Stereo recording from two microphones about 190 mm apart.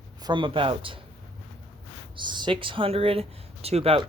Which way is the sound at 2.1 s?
25° right (ahead or behind).